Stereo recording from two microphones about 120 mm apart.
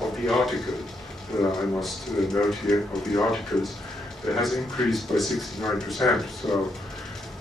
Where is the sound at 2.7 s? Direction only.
5° left (ahead or behind).